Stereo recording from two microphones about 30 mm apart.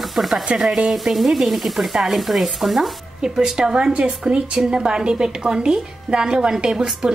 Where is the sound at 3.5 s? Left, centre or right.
Right.